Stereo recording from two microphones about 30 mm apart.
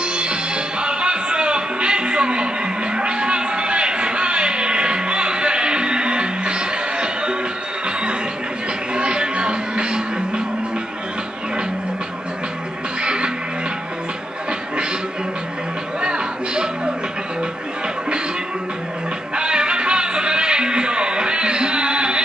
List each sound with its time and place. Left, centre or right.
0.0 s music: right
8.9 s music: right
13.0 s music: right
16.0 s music: right
19.3 s music: right